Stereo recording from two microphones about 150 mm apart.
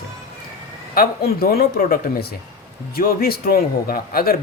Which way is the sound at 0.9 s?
85° left.